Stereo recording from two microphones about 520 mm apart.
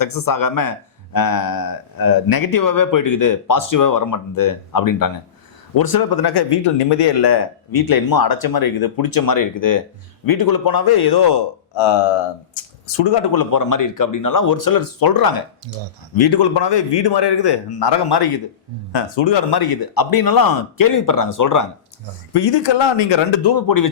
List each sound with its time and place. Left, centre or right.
0.0 s a man's voice: left
13.1 s a man's voice: left
22.3 s speech: left
23.6 s speech: left